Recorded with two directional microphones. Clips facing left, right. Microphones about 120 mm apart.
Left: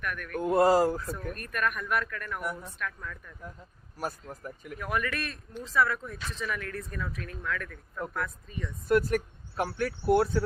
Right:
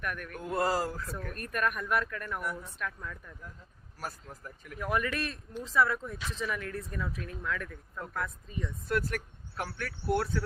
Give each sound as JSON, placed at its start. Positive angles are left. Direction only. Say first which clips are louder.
{"t": 0.0, "sound": "speech", "louder": "left 1 dB", "side_deg": -30}
{"t": 0.4, "sound": "speech", "louder": "left 8 dB", "side_deg": 20}
{"t": 1.4, "sound": "speech", "louder": "right 2 dB", "side_deg": -30}
{"t": 2.4, "sound": "speech", "louder": "left 2 dB", "side_deg": 20}
{"t": 2.7, "sound": "speech", "louder": "left 1 dB", "side_deg": -20}
{"t": 3.9, "sound": "speech", "louder": "left 5 dB", "side_deg": 20}
{"t": 4.8, "sound": "speech", "louder": "right 1 dB", "side_deg": -25}
{"t": 6.1, "sound": "speech", "louder": "even", "side_deg": -10}
{"t": 6.5, "sound": "speech", "louder": "left 1 dB", "side_deg": -20}
{"t": 8.9, "sound": "speech", "louder": "left 8 dB", "side_deg": 20}